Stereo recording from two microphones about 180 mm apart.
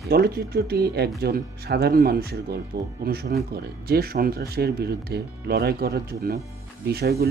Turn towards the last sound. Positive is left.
turn(degrees=-65)  # may be behind; listen again after turning